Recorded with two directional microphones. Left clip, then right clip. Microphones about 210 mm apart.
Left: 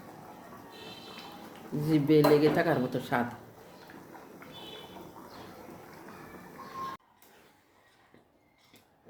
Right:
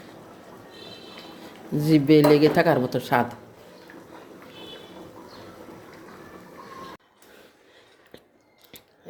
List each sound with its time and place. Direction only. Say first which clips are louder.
1.8 s speech: right 7 dB; 35° right (ahead or behind)